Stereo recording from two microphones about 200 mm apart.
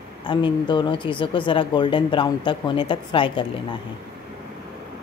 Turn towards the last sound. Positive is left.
turn(degrees=25)  # may be behind; listen again after turning